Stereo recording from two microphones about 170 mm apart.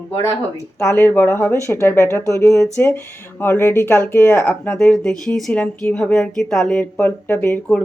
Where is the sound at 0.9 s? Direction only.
15° left (ahead or behind).